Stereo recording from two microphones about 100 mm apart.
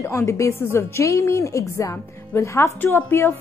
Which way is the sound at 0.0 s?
30° left (ahead or behind).